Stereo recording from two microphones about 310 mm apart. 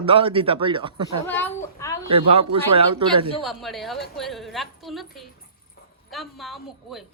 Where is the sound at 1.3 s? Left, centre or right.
Centre.